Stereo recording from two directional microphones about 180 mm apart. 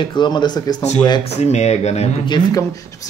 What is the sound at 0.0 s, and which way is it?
Speech, 25° left (ahead or behind).